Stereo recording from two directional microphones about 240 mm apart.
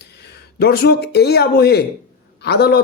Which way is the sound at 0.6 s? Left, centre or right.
Left.